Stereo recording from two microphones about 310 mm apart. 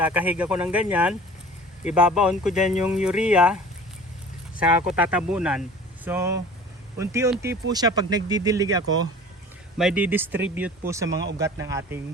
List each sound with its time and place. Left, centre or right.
0.0 s speech: centre
4.9 s speech: centre
11.1 s speech: right
11.6 s speech: centre